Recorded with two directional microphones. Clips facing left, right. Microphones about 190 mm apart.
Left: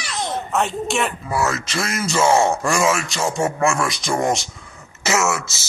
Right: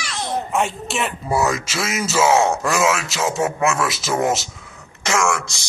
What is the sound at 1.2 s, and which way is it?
A child's voice, 20° right (ahead or behind).